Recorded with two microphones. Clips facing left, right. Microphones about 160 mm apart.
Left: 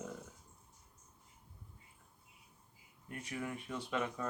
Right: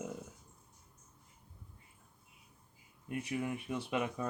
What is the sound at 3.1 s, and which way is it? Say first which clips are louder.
Speech: right 5 dB; 15° right (ahead or behind).